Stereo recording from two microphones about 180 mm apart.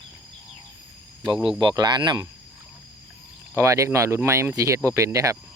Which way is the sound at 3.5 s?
15° right (ahead or behind).